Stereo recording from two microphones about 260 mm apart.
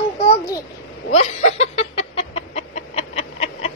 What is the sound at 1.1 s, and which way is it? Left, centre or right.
Chicken, left.